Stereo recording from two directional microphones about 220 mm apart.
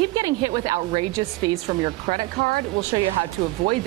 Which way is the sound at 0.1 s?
20° right (ahead or behind).